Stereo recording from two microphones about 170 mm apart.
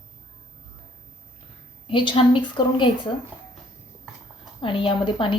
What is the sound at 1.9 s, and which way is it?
A woman's voice, 30° left (ahead or behind).